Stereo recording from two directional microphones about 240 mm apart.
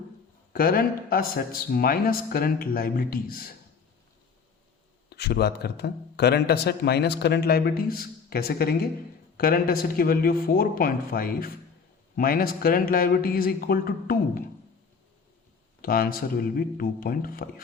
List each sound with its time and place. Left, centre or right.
0.5 s a man's voice: left
5.0 s a man's voice: left
15.8 s a man's voice: left